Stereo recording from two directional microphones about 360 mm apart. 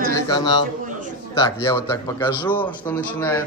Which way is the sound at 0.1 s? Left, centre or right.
Centre.